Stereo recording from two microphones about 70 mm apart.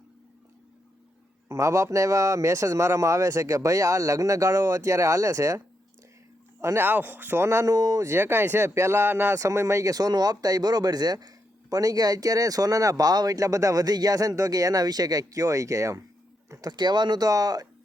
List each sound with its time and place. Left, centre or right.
1.5 s speech: right
6.6 s speech: right
9.0 s speech: right
9.3 s speech: right
16.5 s speech: right